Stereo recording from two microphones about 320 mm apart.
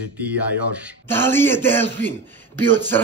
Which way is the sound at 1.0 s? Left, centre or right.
Centre.